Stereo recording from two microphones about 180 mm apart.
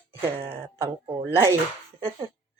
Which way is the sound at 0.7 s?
15° right (ahead or behind).